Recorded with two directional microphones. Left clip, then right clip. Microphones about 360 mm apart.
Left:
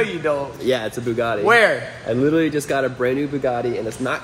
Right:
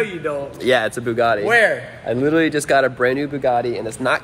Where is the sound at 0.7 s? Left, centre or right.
Centre.